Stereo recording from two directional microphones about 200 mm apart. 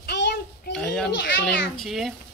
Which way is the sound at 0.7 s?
Centre (ahead or behind).